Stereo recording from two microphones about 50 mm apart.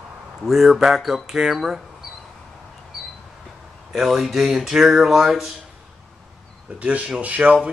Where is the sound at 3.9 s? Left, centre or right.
Centre.